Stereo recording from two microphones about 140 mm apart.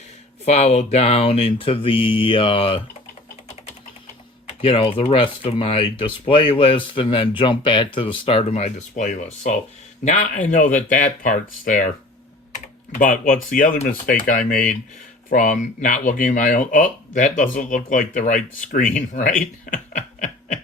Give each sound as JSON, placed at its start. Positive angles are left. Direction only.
{"t": 0.4, "sound": "speech", "side_deg": 50}
{"t": 4.4, "sound": "a man's voice", "side_deg": 45}